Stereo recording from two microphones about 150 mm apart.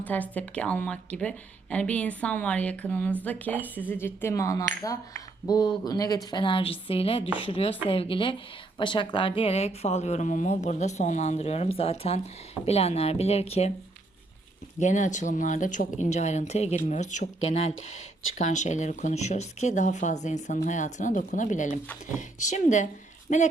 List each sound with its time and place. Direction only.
0.0 s a woman's voice: 10° left (ahead or behind); by 13.7 s 45° left (ahead or behind)
14.8 s speech: 55° left (ahead or behind)